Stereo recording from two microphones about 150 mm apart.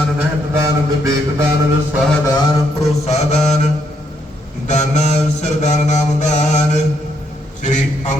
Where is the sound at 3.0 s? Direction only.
45° left (ahead or behind).